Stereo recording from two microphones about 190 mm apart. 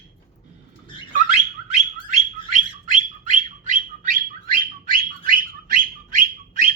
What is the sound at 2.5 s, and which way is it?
Bird, 40° right (ahead or behind).